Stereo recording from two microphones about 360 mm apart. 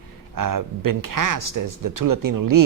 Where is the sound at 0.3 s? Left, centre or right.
Right.